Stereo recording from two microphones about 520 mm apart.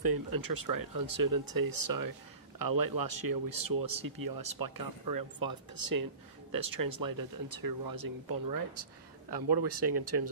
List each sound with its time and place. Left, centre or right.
0.0 s speech: right